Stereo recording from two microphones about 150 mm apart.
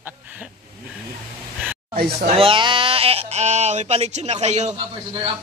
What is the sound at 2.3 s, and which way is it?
Speech, 35° right (ahead or behind).